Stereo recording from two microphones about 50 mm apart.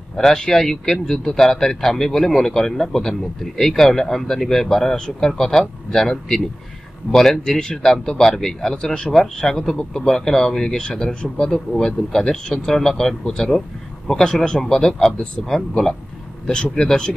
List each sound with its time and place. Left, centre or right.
0.1 s speech: centre